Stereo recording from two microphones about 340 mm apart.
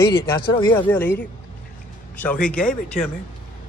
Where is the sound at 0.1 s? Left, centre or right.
Centre.